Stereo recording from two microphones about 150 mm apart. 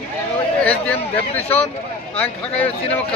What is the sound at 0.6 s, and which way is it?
Speech, 10° left (ahead or behind).